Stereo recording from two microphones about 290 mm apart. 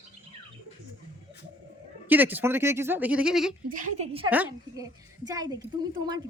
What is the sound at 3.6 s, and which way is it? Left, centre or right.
Speech, right.